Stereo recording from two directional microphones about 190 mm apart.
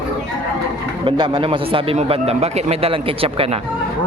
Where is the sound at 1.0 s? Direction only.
25° right (ahead or behind).